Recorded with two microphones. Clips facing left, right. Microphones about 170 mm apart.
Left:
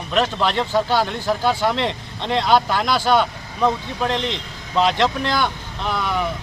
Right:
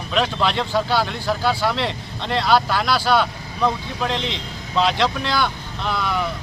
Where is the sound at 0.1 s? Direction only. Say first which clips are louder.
Left 1 dB; 10° left (ahead or behind).